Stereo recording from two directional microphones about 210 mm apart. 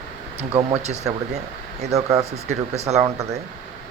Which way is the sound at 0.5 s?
30° right (ahead or behind).